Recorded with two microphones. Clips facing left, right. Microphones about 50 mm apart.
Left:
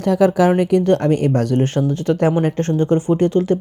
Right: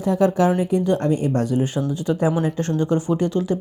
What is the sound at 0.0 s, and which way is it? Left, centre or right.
Speech, left.